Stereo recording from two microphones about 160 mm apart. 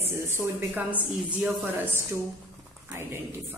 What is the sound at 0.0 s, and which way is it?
A man's voice, 15° right (ahead or behind).